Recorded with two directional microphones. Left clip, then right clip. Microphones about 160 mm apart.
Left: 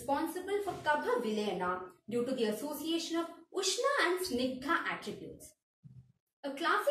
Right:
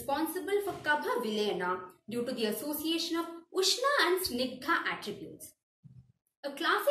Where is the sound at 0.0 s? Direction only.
15° right (ahead or behind).